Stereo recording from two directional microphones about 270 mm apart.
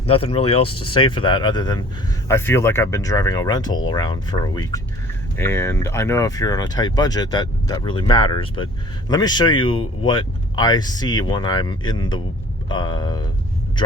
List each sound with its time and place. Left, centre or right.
0.1 s speech: left